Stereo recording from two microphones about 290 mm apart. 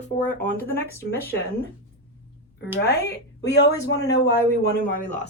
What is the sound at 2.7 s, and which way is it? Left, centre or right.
Speech, left.